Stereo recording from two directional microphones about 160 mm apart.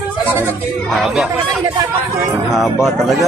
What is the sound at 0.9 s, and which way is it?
Speech, centre (ahead or behind).